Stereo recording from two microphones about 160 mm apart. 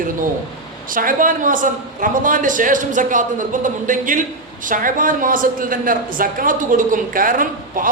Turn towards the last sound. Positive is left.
turn(degrees=-60)  # may be behind; listen again after turning